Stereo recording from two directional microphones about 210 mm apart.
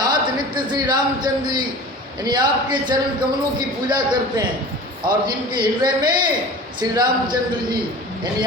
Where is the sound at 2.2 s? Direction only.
20° right (ahead or behind).